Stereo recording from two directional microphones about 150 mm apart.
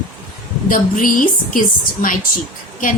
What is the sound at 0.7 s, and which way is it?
A woman's voice, 65° left (ahead or behind).